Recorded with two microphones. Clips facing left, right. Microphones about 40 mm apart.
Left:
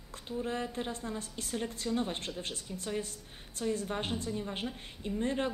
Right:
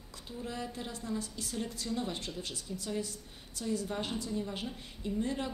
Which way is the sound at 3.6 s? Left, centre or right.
Left.